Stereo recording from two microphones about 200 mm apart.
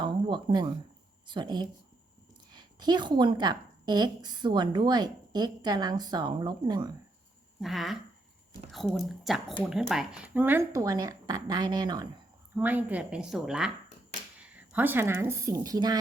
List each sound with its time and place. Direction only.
0.0 s a sound: 25° right (ahead or behind)
1.3 s a woman's voice: 20° right (ahead or behind)
7.6 s a woman's voice: centre (ahead or behind); by 12.0 s 20° right (ahead or behind)
12.5 s a woman's voice: 10° right (ahead or behind)